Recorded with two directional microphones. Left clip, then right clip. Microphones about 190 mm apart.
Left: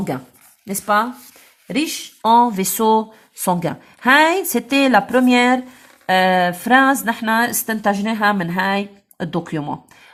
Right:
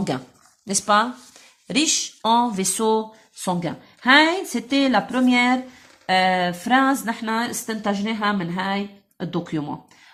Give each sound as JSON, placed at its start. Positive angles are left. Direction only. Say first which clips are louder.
{"t": 1.6, "sound": "speech", "louder": "right 1 dB", "side_deg": 20}